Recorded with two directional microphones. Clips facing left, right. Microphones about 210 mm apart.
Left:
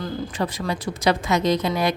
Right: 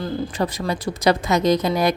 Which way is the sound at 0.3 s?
40° right (ahead or behind).